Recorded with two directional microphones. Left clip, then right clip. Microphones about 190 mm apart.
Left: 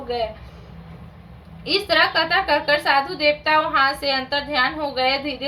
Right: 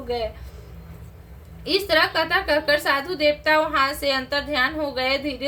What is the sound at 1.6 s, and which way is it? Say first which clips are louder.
A woman's voice: left 2 dB; 25° right (ahead or behind).